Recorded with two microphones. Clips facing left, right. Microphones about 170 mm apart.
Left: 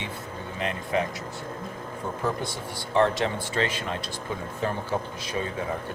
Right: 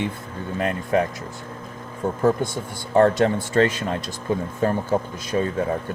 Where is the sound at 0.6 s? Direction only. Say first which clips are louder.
Right 6 dB; 45° right (ahead or behind).